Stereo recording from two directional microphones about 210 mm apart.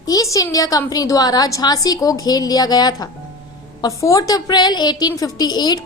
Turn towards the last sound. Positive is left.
turn(degrees=20)  # may be behind; listen again after turning